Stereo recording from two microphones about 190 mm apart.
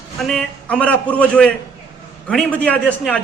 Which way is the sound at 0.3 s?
5° left (ahead or behind).